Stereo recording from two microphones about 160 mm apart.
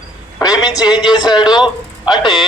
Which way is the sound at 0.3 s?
20° left (ahead or behind).